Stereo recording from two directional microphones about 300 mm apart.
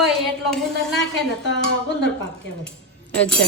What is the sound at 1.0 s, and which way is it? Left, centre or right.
Speech, left.